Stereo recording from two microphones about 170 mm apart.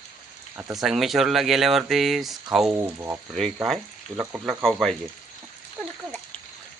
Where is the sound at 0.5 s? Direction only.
Centre (ahead or behind).